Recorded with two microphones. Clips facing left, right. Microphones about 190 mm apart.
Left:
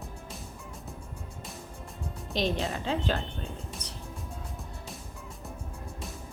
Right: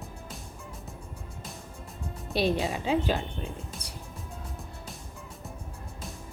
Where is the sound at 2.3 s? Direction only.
10° right (ahead or behind).